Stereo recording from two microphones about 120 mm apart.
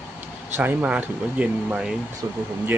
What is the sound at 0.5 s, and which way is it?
Speech, 15° right (ahead or behind).